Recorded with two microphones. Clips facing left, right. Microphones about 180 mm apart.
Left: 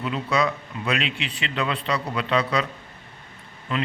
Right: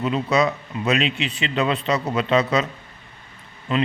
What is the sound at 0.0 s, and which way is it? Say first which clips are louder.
A man's voice: right 4 dB; 20° right (ahead or behind).